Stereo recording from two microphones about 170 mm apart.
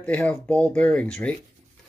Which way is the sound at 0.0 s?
5° left (ahead or behind).